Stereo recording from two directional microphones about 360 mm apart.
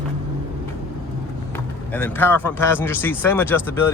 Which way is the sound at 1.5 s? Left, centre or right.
Centre.